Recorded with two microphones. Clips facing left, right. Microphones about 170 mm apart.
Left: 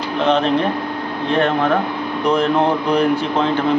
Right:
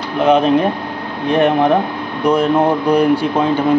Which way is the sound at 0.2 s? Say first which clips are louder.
Right 4 dB; 10° right (ahead or behind).